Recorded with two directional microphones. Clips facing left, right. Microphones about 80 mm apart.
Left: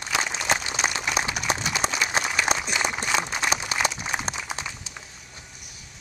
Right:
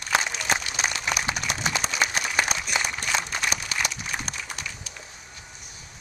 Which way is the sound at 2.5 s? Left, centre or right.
Left.